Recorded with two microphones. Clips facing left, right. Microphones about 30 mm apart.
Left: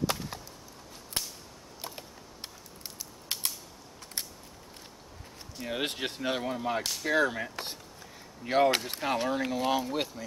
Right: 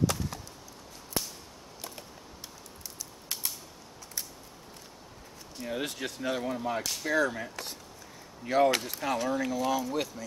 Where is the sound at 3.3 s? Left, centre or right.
Left.